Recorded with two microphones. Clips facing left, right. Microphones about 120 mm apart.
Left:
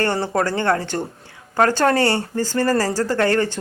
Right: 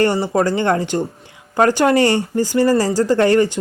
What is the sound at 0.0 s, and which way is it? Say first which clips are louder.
Speech: right 4 dB; 15° right (ahead or behind).